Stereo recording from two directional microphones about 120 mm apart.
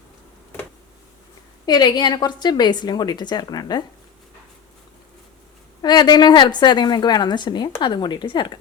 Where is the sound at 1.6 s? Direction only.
35° left (ahead or behind).